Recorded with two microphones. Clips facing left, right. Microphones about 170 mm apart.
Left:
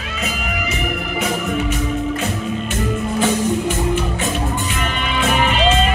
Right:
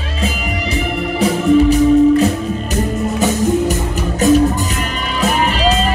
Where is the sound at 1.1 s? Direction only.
35° right (ahead or behind).